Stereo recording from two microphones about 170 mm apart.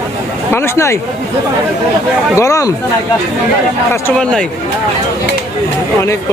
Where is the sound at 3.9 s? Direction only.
5° left (ahead or behind).